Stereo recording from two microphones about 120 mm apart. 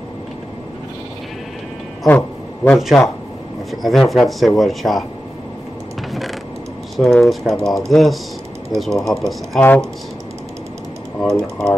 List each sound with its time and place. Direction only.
2.0 s a sound: 15° left (ahead or behind)
2.7 s speech: centre (ahead or behind)
7.0 s speech: centre (ahead or behind)
11.1 s speech: 5° left (ahead or behind)